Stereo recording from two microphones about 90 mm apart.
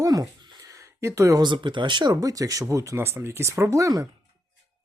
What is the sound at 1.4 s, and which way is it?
Speech, 60° right (ahead or behind).